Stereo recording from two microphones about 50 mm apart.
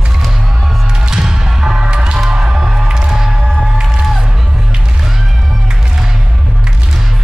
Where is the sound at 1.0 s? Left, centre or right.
Centre.